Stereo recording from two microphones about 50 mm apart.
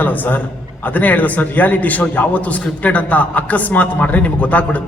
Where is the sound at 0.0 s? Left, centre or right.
Left.